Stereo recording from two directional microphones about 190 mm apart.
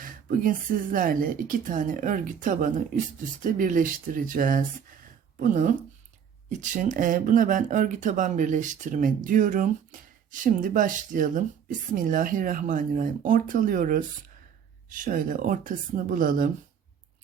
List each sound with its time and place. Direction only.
0.0 s speech: 45° right (ahead or behind)